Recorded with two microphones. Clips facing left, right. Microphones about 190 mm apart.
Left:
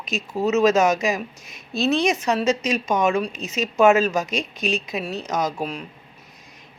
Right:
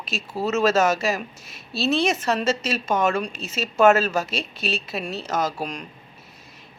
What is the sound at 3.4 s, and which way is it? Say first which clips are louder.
Speech: left 3 dB; 45° left (ahead or behind).